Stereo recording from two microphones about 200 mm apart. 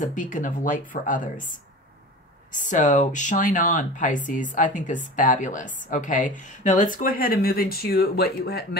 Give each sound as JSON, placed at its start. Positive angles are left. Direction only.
{"t": 0.0, "sound": "speech", "side_deg": 40}